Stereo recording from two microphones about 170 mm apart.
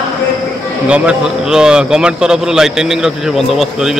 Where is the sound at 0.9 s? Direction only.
5° right (ahead or behind).